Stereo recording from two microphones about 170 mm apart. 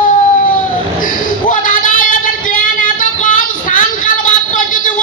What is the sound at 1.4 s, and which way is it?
Child singing, 50° left (ahead or behind).